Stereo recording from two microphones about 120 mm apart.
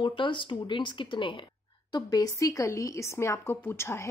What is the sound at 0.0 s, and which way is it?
Speech, 45° left (ahead or behind).